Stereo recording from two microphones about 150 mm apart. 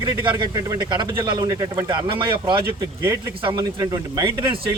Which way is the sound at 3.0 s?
20° right (ahead or behind).